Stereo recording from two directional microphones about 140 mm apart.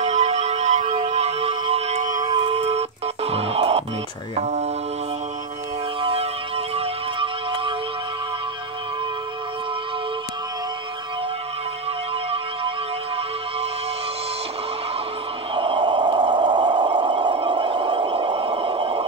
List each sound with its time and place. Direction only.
0.0 s a sound: 55° right (ahead or behind)
2.3 s a sound: 45° right (ahead or behind)
3.3 s music: 45° right (ahead or behind)
4.4 s mantra: 55° right (ahead or behind)
5.9 s music: 40° right (ahead or behind)
15.5 s radio: 35° right (ahead or behind)